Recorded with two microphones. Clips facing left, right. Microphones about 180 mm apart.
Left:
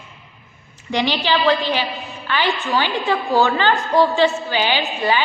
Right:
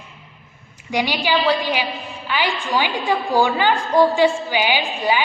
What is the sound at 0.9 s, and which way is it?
A woman's voice, 10° right (ahead or behind).